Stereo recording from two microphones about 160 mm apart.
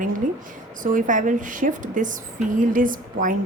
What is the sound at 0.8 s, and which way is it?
A woman's voice, 55° right (ahead or behind).